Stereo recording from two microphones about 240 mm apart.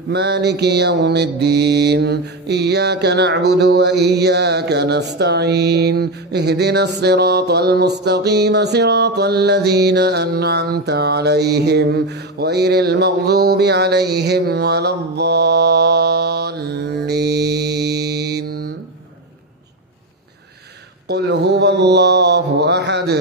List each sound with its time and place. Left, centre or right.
0.1 s mantra: right
7.0 s music: right
21.1 s mantra: right